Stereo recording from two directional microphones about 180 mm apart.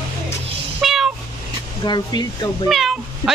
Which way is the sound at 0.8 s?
Centre (ahead or behind).